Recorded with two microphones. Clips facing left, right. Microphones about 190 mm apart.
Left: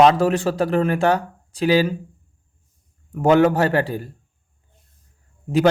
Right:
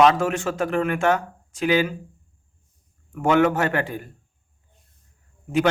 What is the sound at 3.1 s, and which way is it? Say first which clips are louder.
Speech: left 4 dB; 35° left (ahead or behind).